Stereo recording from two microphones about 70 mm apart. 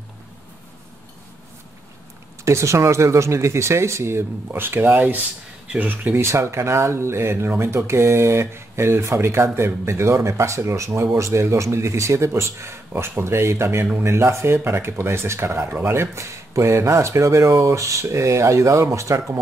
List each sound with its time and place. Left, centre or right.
2.4 s speech: right
6.2 s speech: right